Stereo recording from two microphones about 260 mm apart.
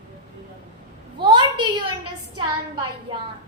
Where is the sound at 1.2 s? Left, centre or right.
Centre.